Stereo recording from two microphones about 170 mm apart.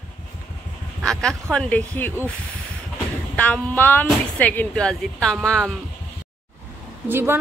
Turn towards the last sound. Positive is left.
turn(degrees=-15)  # may be behind; listen again after turning